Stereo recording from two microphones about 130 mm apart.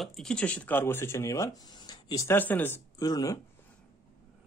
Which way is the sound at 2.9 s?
30° left (ahead or behind).